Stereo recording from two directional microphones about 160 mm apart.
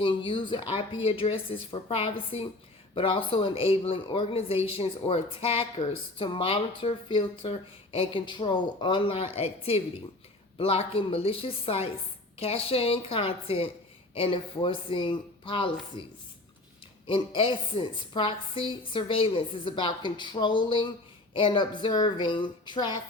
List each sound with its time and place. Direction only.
0.0 s a woman's voice: 30° left (ahead or behind)
17.1 s a woman's voice: 35° left (ahead or behind)